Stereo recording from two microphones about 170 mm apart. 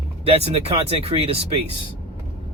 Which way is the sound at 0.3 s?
40° right (ahead or behind).